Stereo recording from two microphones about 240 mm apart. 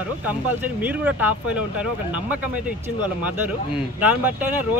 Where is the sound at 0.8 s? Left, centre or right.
Centre.